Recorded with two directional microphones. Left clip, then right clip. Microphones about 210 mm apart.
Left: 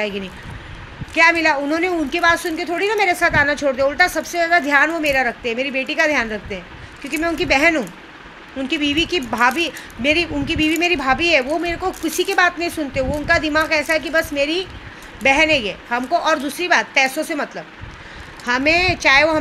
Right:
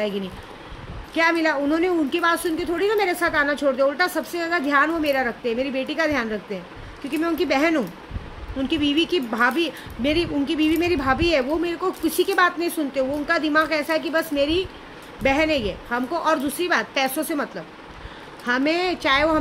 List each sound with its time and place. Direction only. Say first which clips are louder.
0.0 s speech: left 2 dB; 15° right (ahead or behind)